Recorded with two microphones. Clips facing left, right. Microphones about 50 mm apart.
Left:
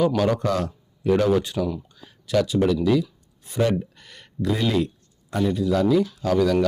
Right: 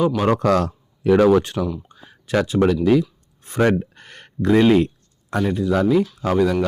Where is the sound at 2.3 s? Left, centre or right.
Right.